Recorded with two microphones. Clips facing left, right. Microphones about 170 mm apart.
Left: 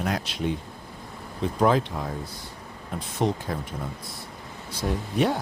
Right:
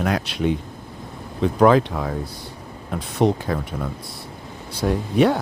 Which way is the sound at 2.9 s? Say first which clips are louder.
Right 6 dB; 75° right (ahead or behind).